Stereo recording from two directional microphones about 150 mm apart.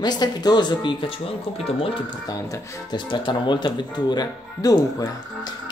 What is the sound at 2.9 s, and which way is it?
Speech, 30° left (ahead or behind).